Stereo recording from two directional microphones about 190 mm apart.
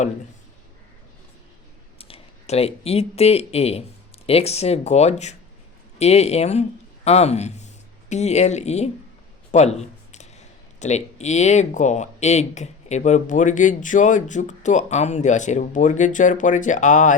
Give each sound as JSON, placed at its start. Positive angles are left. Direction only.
{"t": 2.0, "sound": "speech", "side_deg": 30}
{"t": 9.5, "sound": "a sound", "side_deg": 35}
{"t": 10.8, "sound": "speech", "side_deg": 35}